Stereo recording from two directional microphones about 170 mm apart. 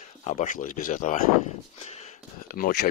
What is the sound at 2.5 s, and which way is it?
Speech, 65° left (ahead or behind).